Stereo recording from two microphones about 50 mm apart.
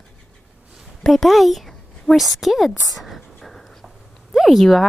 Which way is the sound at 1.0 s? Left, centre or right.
Centre.